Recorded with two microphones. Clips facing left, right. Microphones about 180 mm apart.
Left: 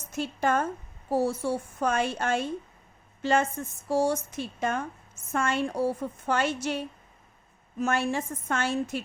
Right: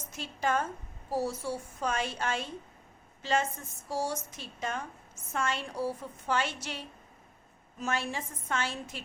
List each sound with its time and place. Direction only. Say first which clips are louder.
0.1 s a woman's voice: left 5 dB; 50° left (ahead or behind)